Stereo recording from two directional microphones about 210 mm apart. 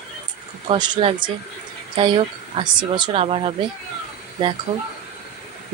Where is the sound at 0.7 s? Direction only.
25° right (ahead or behind).